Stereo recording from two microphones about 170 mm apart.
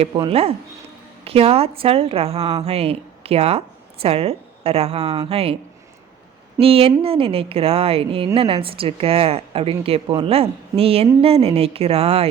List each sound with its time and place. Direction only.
0.1 s speech: 30° right (ahead or behind)
6.6 s speech: 35° right (ahead or behind)